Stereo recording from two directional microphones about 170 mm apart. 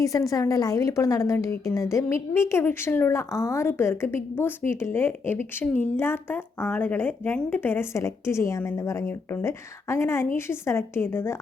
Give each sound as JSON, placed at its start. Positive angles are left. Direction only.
{"t": 0.0, "sound": "a woman's voice", "side_deg": 20}